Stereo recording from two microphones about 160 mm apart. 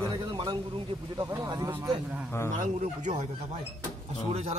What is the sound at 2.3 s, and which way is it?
Speech, 15° left (ahead or behind).